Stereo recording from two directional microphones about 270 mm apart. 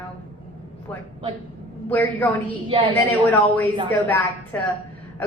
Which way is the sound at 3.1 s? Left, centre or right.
Centre.